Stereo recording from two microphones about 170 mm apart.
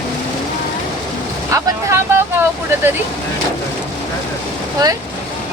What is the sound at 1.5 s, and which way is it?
Boat, 20° right (ahead or behind).